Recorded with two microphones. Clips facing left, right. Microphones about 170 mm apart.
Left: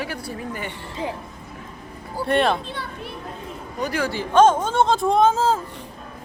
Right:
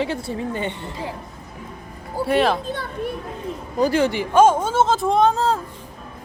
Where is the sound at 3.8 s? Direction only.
25° right (ahead or behind).